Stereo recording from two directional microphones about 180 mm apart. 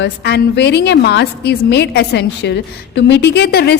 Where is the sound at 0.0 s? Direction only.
70° left (ahead or behind).